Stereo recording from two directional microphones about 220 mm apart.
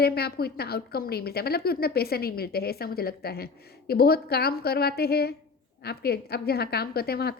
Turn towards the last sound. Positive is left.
turn(degrees=45)  # may be behind; listen again after turning